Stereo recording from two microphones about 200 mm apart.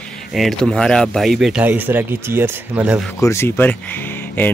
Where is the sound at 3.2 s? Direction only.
15° left (ahead or behind).